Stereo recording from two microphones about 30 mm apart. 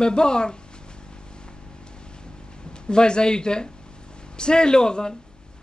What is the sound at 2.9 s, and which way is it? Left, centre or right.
Speech, left.